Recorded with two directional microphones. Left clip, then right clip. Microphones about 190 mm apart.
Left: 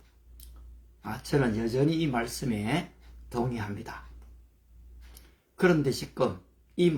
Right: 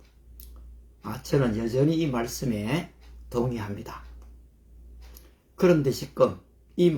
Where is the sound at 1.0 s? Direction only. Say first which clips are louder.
Right 2 dB; 10° right (ahead or behind).